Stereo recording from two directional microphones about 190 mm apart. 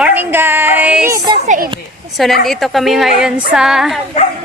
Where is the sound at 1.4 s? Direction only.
40° right (ahead or behind).